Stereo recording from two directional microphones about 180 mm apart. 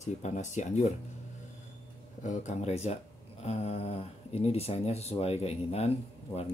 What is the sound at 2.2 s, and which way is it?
Speech, 40° left (ahead or behind).